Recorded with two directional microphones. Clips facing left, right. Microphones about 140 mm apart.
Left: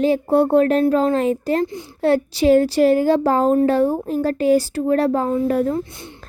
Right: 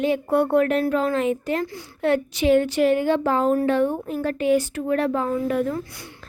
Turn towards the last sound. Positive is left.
turn(degrees=25)  # may be behind; listen again after turning